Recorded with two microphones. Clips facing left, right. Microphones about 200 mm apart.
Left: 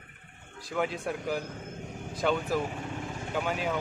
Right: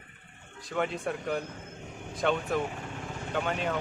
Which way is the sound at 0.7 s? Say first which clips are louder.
Even; centre (ahead or behind).